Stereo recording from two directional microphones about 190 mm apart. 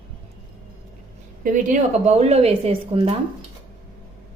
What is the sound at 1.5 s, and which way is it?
A woman's voice, 45° right (ahead or behind).